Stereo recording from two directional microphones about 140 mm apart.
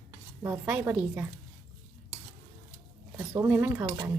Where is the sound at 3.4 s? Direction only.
15° right (ahead or behind).